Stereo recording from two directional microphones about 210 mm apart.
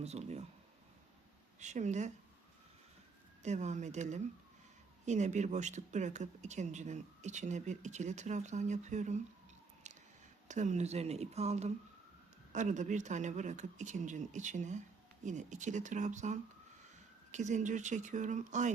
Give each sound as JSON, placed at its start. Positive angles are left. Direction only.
{"t": 0.0, "sound": "speech", "side_deg": -30}
{"t": 1.5, "sound": "speech", "side_deg": -35}
{"t": 3.4, "sound": "speech", "side_deg": -35}
{"t": 9.8, "sound": "a sound", "side_deg": -35}
{"t": 10.5, "sound": "speech", "side_deg": -35}